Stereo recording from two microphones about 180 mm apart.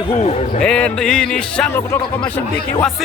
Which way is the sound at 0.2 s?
40° left (ahead or behind).